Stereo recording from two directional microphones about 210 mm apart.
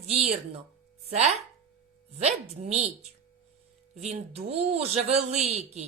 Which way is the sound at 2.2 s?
30° right (ahead or behind).